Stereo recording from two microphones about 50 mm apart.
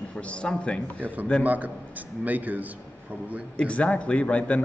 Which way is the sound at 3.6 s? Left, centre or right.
Left.